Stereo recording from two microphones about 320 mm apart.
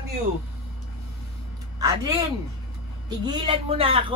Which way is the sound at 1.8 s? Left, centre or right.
Centre.